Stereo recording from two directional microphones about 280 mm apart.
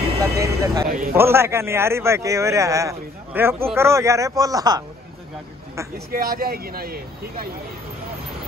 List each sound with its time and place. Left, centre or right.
0.2 s speech: centre
0.8 s speech: right
1.1 s speech: centre
6.1 s speech: right